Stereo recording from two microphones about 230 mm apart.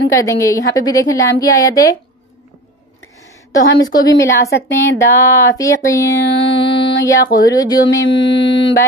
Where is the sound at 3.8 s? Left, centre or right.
Centre.